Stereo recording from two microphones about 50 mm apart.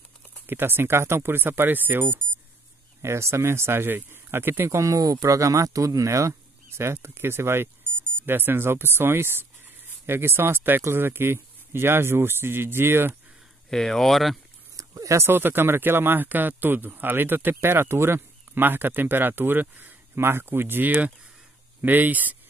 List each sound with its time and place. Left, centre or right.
0.5 s speech: right
3.0 s speech: right
4.6 s speech: right
8.3 s speech: right
13.7 s speech: centre
14.8 s a sound: right
15.2 s speech: right
17.6 s speech: right
20.2 s speech: right